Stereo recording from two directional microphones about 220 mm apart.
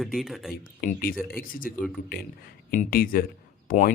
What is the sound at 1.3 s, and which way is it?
Speech, 40° left (ahead or behind).